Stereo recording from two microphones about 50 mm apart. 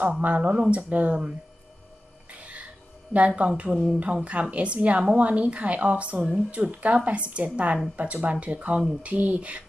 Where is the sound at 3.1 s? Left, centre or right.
Right.